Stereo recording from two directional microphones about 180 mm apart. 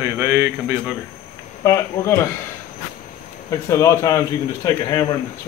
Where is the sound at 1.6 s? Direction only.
15° left (ahead or behind).